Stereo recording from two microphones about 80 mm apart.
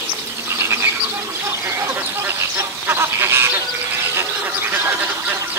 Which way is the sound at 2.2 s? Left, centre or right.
Right.